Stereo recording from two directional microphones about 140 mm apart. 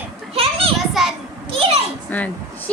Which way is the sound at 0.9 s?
Centre (ahead or behind).